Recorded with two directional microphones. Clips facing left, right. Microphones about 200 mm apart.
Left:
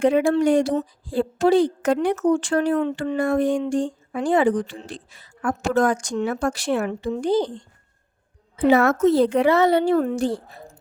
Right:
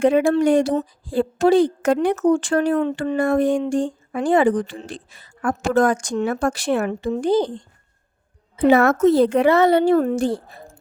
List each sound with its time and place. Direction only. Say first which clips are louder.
0.0 s a woman's voice: right 2 dB; 55° right (ahead or behind)
8.5 s a woman's voice: right 2 dB; 55° right (ahead or behind)